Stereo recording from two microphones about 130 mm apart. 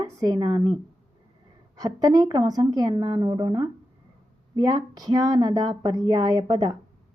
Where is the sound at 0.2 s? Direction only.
25° right (ahead or behind).